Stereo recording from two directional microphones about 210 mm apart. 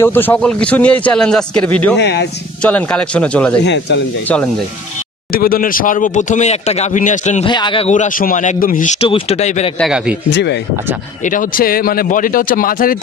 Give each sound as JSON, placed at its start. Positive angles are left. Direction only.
{"t": 0.0, "sound": "a man's voice", "side_deg": 10}
{"t": 2.0, "sound": "speech", "side_deg": 55}
{"t": 2.6, "sound": "a man's voice", "side_deg": 5}
{"t": 3.6, "sound": "speech", "side_deg": 55}
{"t": 5.3, "sound": "speech", "side_deg": 45}
{"t": 7.4, "sound": "a man's voice", "side_deg": 20}
{"t": 7.9, "sound": "speech", "side_deg": 40}
{"t": 9.8, "sound": "a man's voice", "side_deg": -5}
{"t": 10.3, "sound": "speech", "side_deg": 55}
{"t": 11.2, "sound": "speech", "side_deg": 40}